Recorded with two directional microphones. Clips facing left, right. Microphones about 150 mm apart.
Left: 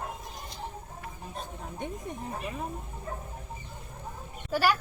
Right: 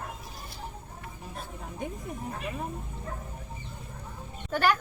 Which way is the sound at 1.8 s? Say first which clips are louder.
Right 1 dB; centre (ahead or behind).